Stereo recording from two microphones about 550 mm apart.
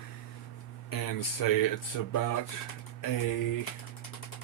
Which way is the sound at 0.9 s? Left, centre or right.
Left.